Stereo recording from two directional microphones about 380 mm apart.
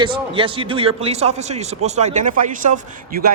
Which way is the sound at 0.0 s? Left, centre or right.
Centre.